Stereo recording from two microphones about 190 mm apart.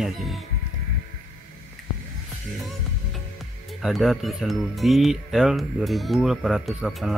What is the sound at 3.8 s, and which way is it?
Speech, centre (ahead or behind).